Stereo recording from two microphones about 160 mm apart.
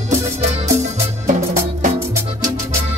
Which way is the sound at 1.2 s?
50° right (ahead or behind).